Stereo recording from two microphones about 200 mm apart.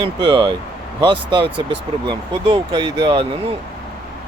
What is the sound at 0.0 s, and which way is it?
Speech, 25° right (ahead or behind).